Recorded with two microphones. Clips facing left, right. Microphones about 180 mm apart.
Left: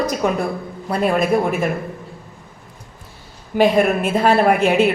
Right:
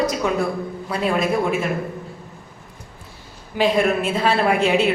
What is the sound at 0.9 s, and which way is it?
Speech, 50° left (ahead or behind).